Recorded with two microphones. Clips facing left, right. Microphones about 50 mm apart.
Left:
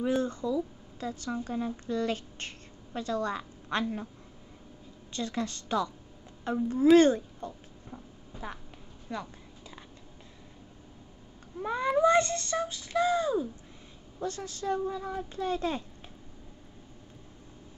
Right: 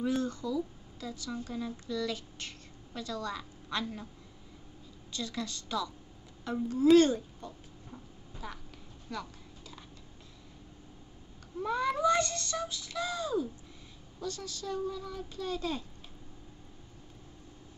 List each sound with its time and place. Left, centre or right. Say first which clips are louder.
0.0 s a woman's voice: left 3 dB; left
5.1 s speech: left 4 dB; left
9.1 s a sound: left 3 dB; left
11.6 s speech: left 4 dB; left